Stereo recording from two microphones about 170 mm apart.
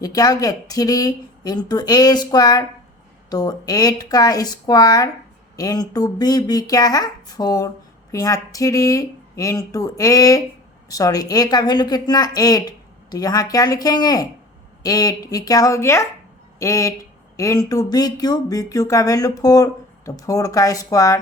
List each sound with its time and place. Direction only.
0.0 s speech: 20° left (ahead or behind)